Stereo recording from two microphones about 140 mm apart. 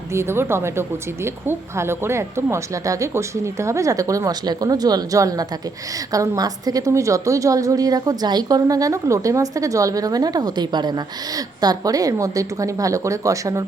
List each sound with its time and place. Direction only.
0.1 s a woman's voice: 20° right (ahead or behind)